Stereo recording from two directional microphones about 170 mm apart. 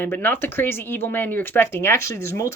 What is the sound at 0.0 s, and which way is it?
Speech, 10° left (ahead or behind).